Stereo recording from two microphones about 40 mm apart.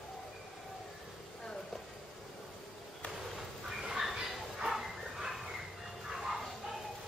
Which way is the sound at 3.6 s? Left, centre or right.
Centre.